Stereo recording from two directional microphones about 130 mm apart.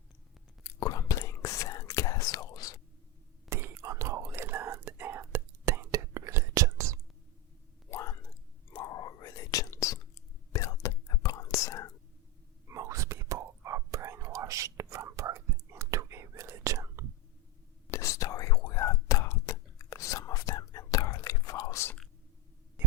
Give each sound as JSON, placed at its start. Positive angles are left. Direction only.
{"t": 0.6, "sound": "whispering", "side_deg": 25}
{"t": 3.5, "sound": "whispering", "side_deg": -20}
{"t": 7.9, "sound": "whispering", "side_deg": 20}
{"t": 12.6, "sound": "whispering", "side_deg": -25}
{"t": 17.9, "sound": "whispering", "side_deg": 25}